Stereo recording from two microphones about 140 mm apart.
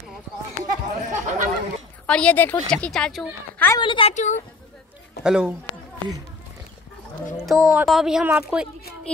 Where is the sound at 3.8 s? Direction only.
40° left (ahead or behind).